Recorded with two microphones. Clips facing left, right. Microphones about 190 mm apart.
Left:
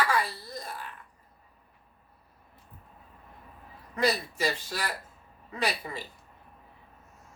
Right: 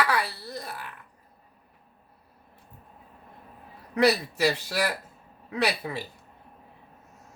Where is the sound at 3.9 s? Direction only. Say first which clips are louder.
Right 5 dB; 70° right (ahead or behind).